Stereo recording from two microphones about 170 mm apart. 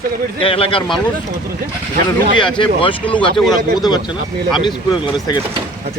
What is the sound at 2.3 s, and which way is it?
Speech, 30° left (ahead or behind).